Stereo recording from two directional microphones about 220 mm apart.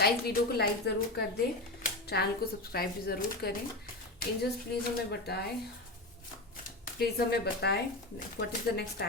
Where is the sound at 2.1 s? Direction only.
45° left (ahead or behind).